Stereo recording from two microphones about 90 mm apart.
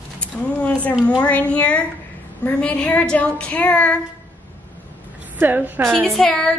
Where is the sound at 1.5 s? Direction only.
15° left (ahead or behind).